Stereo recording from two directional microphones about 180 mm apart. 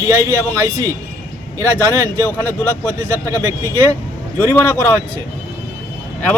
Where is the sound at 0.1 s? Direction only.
15° right (ahead or behind).